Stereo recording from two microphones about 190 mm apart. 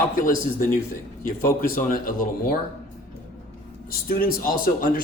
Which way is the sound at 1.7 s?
45° left (ahead or behind).